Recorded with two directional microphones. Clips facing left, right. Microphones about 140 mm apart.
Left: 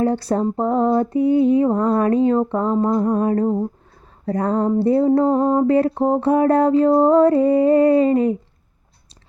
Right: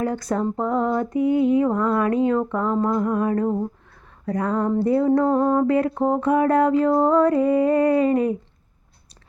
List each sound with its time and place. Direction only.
0.0 s a sound: 30° left (ahead or behind)
0.5 s mantra: 30° left (ahead or behind)
4.8 s music: 30° left (ahead or behind)